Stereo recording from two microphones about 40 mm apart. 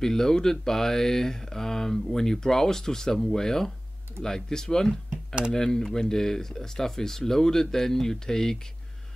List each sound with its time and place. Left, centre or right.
0.0 s speech: centre